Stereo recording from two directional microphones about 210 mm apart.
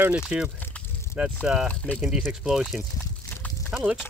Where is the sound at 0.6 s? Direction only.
10° left (ahead or behind).